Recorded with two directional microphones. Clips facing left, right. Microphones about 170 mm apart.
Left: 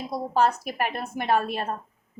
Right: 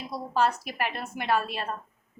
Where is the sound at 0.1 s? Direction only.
45° left (ahead or behind).